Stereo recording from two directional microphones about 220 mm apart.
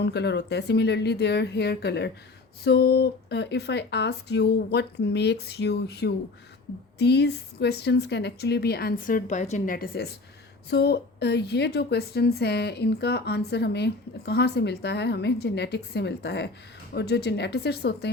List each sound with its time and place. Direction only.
0.0 s a woman's voice: 50° left (ahead or behind)